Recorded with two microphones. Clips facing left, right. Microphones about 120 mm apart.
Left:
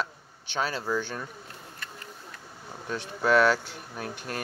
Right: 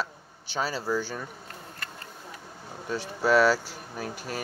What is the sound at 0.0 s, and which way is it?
Speech, 5° right (ahead or behind).